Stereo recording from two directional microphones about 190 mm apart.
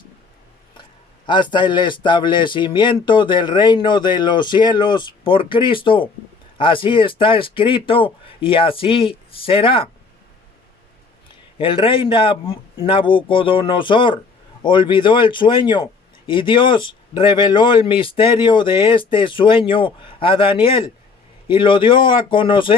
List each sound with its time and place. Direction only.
1.3 s a man's voice: 25° left (ahead or behind)
11.5 s a man's voice: 30° left (ahead or behind)